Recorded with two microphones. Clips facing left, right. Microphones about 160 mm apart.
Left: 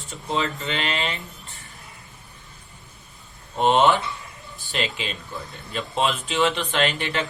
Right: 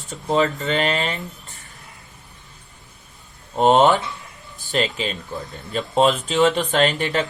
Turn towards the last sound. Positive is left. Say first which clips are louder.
# right 5 dB
turn(degrees=-40)  # may be behind; listen again after turning